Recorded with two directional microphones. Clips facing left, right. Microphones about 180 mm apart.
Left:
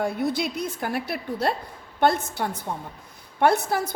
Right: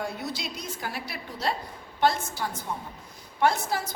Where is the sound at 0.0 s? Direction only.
55° left (ahead or behind).